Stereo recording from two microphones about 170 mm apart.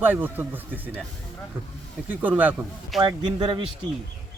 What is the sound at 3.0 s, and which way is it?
Speech, 25° right (ahead or behind).